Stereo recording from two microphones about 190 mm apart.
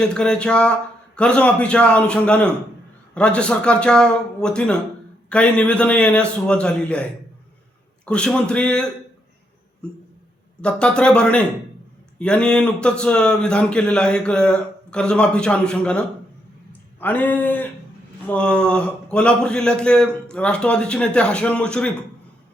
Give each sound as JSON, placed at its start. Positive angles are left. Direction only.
{"t": 0.0, "sound": "speech", "side_deg": 5}
{"t": 8.0, "sound": "speech", "side_deg": 5}
{"t": 17.0, "sound": "a sound", "side_deg": 10}
{"t": 18.3, "sound": "speech", "side_deg": 5}